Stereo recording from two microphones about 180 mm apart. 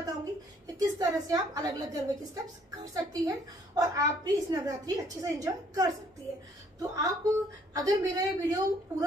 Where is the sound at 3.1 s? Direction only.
20° right (ahead or behind).